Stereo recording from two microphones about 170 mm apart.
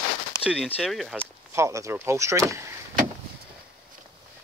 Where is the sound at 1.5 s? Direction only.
15° right (ahead or behind).